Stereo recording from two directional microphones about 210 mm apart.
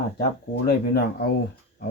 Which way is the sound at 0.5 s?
50° left (ahead or behind).